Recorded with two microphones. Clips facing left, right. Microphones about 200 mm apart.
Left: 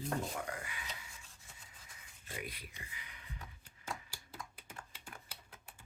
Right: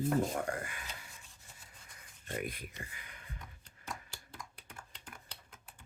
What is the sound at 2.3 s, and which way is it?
Speech, 50° right (ahead or behind).